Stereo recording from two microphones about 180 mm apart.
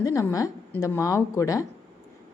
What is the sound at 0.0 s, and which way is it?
A woman's voice, 15° left (ahead or behind).